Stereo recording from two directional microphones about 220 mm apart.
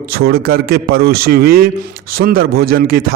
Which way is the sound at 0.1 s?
45° right (ahead or behind).